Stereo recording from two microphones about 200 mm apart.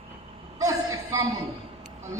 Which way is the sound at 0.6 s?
15° right (ahead or behind).